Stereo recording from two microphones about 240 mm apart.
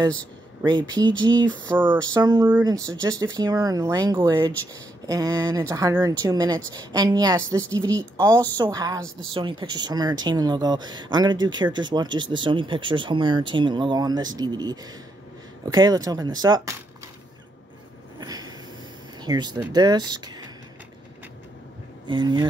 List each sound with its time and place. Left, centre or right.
0.6 s speech: centre
8.5 s speech: centre
18.2 s a sound: centre
19.2 s speech: centre
22.0 s speech: centre